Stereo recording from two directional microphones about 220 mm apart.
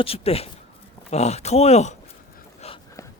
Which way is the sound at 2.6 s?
30° left (ahead or behind).